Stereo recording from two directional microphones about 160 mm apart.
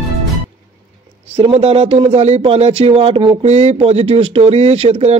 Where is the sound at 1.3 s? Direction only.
35° right (ahead or behind).